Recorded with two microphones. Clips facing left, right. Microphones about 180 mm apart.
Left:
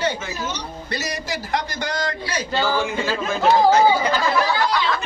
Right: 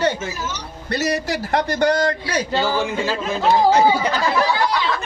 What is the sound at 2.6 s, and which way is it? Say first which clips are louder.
Speech: left 1 dB; 20° right (ahead or behind).